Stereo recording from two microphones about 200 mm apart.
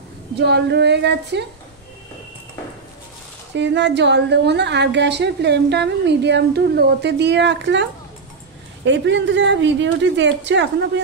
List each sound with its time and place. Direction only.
0.4 s a woman's voice: 55° right (ahead or behind)
3.5 s a woman's voice: 60° right (ahead or behind)